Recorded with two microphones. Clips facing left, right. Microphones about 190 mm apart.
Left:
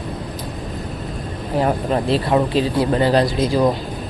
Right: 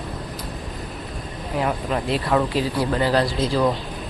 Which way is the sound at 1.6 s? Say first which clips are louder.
Left 5 dB; 35° left (ahead or behind).